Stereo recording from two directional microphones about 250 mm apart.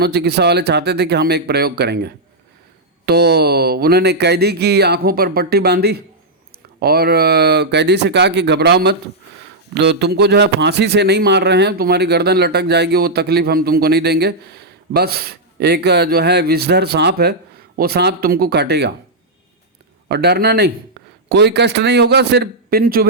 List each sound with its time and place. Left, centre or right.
0.0 s a man's voice: right
20.1 s a man's voice: right